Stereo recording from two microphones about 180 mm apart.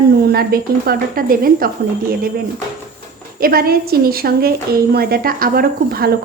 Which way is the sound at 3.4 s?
55° right (ahead or behind).